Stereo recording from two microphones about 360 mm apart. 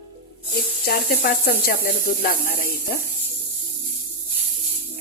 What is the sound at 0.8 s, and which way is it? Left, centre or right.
Speech, left.